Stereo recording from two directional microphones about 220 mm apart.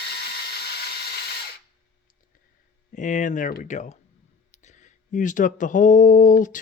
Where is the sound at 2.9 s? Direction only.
35° left (ahead or behind).